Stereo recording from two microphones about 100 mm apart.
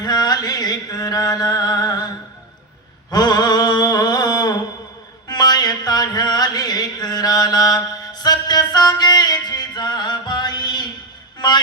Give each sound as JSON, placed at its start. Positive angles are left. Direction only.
{"t": 0.0, "sound": "music", "side_deg": 40}
{"t": 3.1, "sound": "a sound", "side_deg": 45}
{"t": 5.3, "sound": "music", "side_deg": 45}